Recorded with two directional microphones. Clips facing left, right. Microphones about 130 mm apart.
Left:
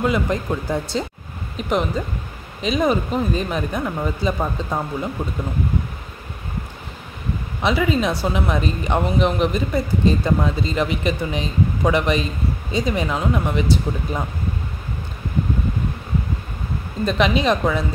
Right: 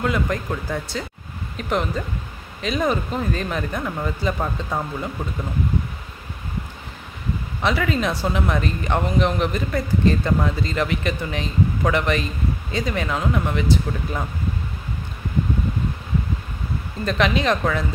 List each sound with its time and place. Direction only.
0.0 s speech: 20° left (ahead or behind)
7.6 s speech: 15° left (ahead or behind)
17.0 s speech: 15° left (ahead or behind)